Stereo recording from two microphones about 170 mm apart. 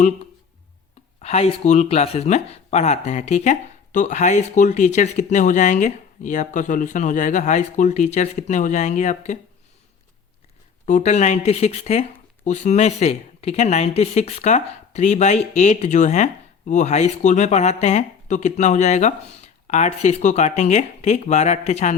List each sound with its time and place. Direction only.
1.2 s speech: 40° left (ahead or behind)
10.8 s speech: 45° left (ahead or behind)